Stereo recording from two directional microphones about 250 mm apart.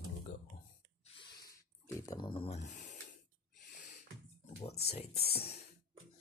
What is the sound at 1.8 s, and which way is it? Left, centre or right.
Speech, centre.